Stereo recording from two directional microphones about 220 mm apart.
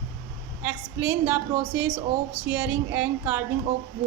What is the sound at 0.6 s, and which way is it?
A woman's voice, 10° right (ahead or behind).